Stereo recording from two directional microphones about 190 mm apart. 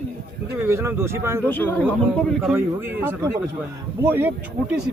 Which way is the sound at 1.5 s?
10° left (ahead or behind).